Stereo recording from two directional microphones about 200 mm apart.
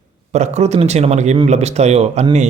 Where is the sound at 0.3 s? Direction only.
35° right (ahead or behind).